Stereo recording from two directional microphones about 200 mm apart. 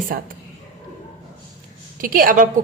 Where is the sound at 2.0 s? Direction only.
45° right (ahead or behind).